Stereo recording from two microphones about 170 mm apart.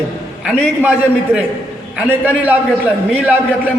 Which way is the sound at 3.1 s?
10° right (ahead or behind).